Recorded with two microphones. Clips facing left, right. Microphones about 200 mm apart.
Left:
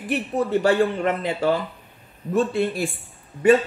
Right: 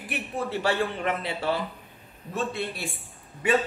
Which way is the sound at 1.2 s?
45° left (ahead or behind).